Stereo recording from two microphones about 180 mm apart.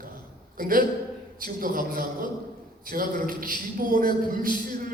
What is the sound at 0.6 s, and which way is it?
A man's voice, 50° right (ahead or behind).